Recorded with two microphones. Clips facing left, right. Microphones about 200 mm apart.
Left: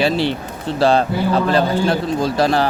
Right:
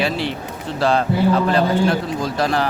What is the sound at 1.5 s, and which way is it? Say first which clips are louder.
A man's voice: even; 30° left (ahead or behind).